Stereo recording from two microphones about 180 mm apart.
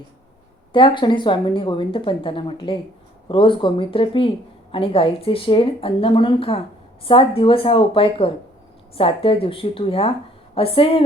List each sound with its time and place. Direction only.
0.7 s speech: 25° left (ahead or behind)